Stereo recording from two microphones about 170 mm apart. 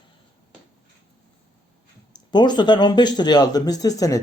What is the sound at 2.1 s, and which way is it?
Speech, 25° left (ahead or behind).